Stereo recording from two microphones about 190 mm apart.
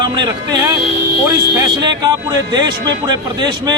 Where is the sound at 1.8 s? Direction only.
20° right (ahead or behind).